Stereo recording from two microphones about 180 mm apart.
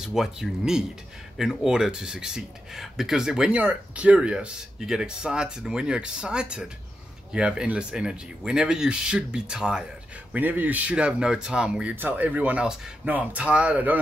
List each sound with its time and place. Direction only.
0.0 s speech: centre (ahead or behind)